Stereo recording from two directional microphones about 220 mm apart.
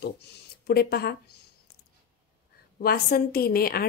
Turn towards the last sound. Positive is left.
turn(degrees=45)  # may be behind; listen again after turning